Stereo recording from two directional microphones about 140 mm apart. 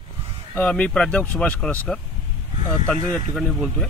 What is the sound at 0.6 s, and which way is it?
A man's voice, 10° left (ahead or behind).